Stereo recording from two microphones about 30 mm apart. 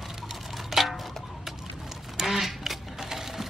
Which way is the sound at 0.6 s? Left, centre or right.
Centre.